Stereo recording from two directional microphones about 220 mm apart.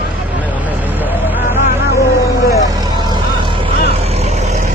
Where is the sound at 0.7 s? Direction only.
10° right (ahead or behind).